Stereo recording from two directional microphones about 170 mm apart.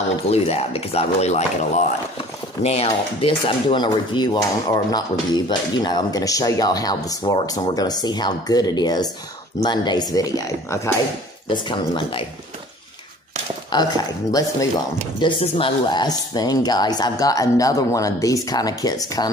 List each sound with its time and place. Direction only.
0.3 s speech: 35° left (ahead or behind); by 10.9 s 20° left (ahead or behind)
11.4 s speech: 30° left (ahead or behind)
13.7 s speech: 25° left (ahead or behind)